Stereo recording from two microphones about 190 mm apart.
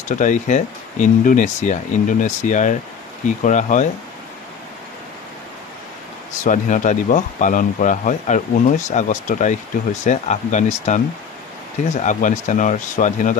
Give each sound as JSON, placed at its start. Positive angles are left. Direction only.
{"t": 0.2, "sound": "speech", "side_deg": 40}
{"t": 6.4, "sound": "speech", "side_deg": 40}